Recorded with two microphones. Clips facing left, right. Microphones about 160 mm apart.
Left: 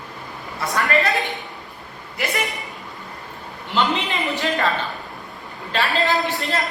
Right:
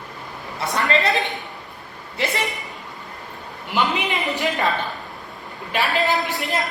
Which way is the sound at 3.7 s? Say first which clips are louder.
Left 1 dB; 20° right (ahead or behind).